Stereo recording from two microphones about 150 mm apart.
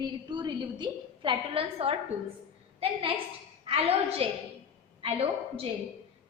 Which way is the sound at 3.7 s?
40° right (ahead or behind).